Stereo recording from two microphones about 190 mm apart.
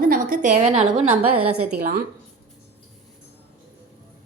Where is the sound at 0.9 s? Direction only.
5° right (ahead or behind).